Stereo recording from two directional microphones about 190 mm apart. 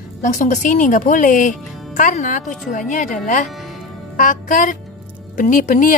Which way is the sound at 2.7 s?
45° left (ahead or behind).